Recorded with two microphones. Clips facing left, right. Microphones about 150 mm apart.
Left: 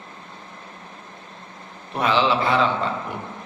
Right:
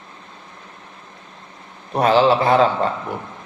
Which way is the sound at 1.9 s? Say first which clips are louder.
Right 6 dB; 40° right (ahead or behind).